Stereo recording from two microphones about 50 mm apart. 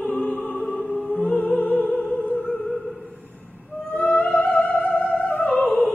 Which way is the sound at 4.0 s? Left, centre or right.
Left.